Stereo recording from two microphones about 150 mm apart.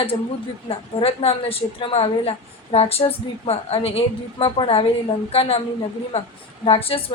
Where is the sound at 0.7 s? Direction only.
40° left (ahead or behind).